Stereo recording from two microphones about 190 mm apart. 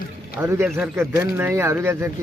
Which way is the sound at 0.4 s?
10° right (ahead or behind).